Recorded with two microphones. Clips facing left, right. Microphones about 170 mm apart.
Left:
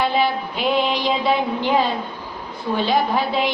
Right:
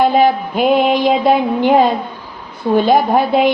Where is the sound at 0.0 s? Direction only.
50° right (ahead or behind).